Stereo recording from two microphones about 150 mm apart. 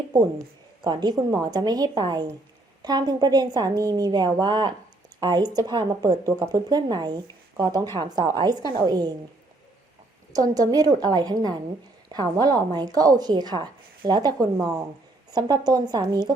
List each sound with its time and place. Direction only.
0.1 s a woman's voice: 20° right (ahead or behind)
10.5 s a woman's voice: 25° right (ahead or behind)